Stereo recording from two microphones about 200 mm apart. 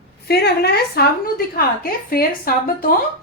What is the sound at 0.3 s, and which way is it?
A woman's voice, 55° left (ahead or behind).